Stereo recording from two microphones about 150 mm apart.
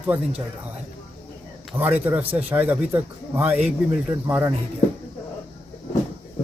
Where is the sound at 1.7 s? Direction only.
10° right (ahead or behind).